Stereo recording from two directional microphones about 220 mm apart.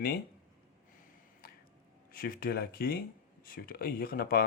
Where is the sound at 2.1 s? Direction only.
40° left (ahead or behind).